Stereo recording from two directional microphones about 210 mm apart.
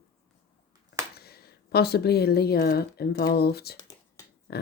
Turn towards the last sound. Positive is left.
turn(degrees=50)  # may be behind; listen again after turning